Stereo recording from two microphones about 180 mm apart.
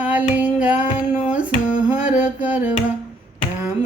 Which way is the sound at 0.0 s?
10° right (ahead or behind).